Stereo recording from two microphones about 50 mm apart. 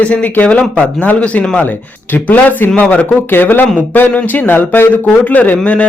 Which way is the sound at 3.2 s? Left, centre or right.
Left.